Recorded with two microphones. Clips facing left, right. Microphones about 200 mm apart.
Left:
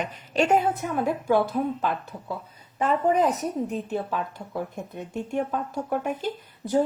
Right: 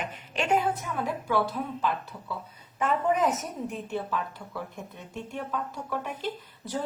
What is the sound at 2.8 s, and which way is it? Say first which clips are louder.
A woman's voice: left 3 dB; 35° left (ahead or behind).